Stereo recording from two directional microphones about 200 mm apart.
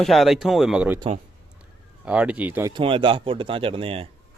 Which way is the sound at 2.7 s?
25° right (ahead or behind).